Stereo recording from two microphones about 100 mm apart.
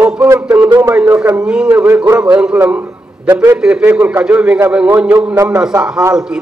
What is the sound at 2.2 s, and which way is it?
A man's voice, 10° right (ahead or behind).